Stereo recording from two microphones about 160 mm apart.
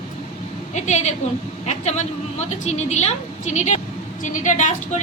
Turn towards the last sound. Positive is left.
turn(degrees=50)  # may be behind; listen again after turning